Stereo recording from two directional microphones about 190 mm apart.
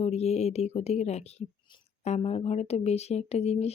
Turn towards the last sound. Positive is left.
turn(degrees=35)  # may be behind; listen again after turning